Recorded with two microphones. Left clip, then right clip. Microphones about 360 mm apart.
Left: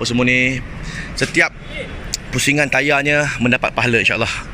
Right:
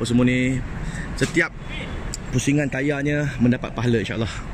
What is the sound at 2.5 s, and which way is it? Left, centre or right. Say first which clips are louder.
Speech: left 8 dB; left.